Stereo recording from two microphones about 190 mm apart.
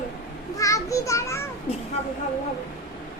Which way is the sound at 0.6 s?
15° left (ahead or behind).